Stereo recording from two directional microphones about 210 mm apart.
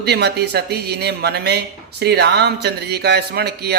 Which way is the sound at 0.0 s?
55° right (ahead or behind).